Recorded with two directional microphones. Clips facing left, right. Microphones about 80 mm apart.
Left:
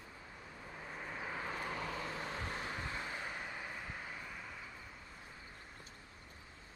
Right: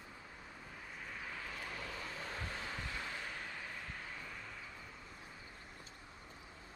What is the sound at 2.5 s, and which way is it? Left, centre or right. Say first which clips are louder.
Vehicle: left 2 dB; left.